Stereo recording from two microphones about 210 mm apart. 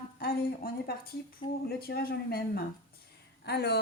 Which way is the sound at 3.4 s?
50° left (ahead or behind).